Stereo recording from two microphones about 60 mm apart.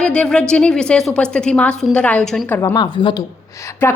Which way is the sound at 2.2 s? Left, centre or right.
Centre.